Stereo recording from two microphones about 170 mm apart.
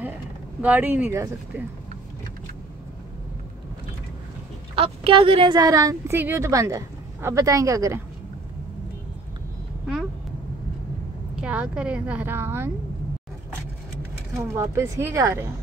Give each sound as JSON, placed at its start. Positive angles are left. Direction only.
{"t": 0.6, "sound": "speech", "side_deg": -10}
{"t": 4.7, "sound": "a woman's voice", "side_deg": -35}
{"t": 11.4, "sound": "speech", "side_deg": -5}
{"t": 14.3, "sound": "speech", "side_deg": -15}